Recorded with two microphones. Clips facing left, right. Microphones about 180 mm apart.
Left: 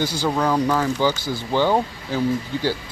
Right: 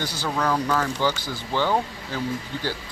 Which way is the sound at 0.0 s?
15° left (ahead or behind).